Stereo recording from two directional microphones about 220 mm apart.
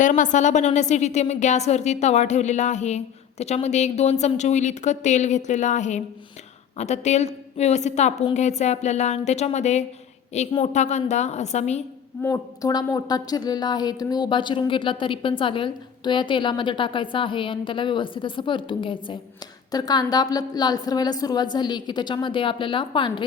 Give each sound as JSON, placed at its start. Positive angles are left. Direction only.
{"t": 0.0, "sound": "a woman's voice", "side_deg": 35}
{"t": 12.2, "sound": "a woman's voice", "side_deg": 15}